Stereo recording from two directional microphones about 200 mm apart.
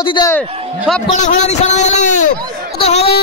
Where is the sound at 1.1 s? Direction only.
35° left (ahead or behind).